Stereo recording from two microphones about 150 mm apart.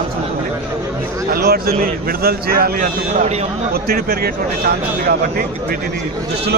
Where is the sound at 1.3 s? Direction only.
90° right.